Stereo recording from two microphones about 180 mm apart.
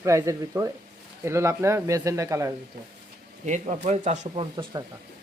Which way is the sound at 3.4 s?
40° right (ahead or behind).